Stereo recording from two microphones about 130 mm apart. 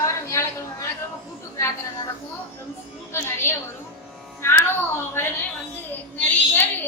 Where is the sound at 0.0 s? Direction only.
20° left (ahead or behind).